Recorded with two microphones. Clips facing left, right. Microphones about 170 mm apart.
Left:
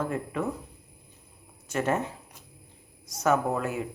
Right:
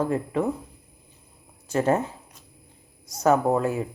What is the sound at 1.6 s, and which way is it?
Speech, 30° right (ahead or behind).